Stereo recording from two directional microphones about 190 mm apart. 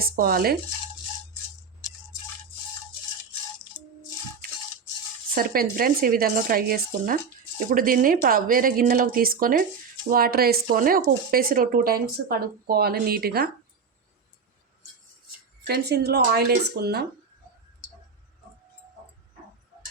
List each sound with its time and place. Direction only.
0.0 s speech: 50° right (ahead or behind)
5.3 s speech: 50° right (ahead or behind)
15.6 s speech: 55° right (ahead or behind)